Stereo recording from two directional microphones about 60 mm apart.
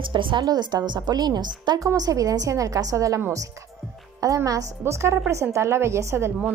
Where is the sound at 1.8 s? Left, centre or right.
Right.